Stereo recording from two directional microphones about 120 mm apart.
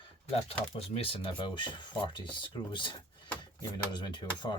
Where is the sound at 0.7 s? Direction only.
50° left (ahead or behind).